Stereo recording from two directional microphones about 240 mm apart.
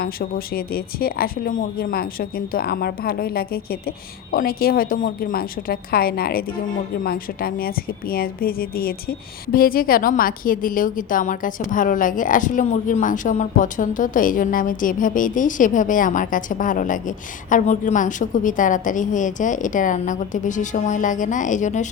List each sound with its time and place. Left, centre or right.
0.0 s a woman's voice: left